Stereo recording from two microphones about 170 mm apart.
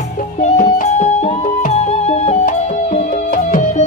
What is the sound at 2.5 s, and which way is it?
Music, 55° left (ahead or behind).